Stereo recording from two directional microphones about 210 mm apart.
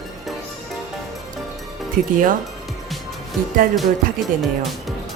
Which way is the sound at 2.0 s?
40° right (ahead or behind).